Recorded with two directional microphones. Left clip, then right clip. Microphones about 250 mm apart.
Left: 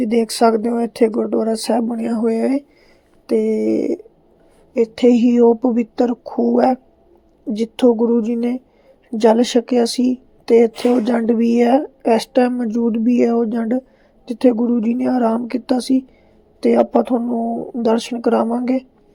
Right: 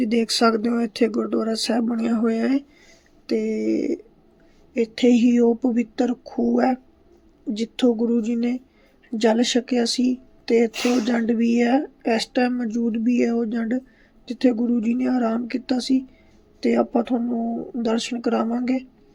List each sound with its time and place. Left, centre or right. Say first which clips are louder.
0.0 s speech: left 5 dB; centre